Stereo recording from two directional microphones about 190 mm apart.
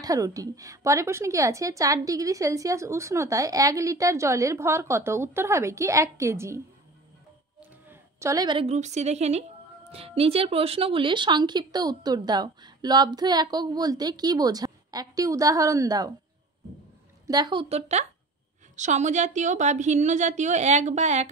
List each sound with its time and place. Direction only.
0.0 s a woman's voice: 20° right (ahead or behind)
7.9 s a woman's voice: 15° right (ahead or behind)
17.3 s a woman's voice: 25° right (ahead or behind)